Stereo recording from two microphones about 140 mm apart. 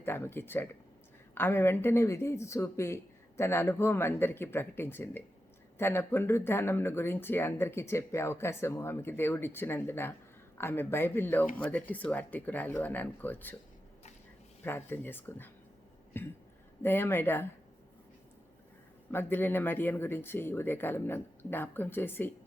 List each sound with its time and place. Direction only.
0.0 s speech: 15° left (ahead or behind)
14.6 s speech: 15° left (ahead or behind)
19.1 s speech: 15° left (ahead or behind)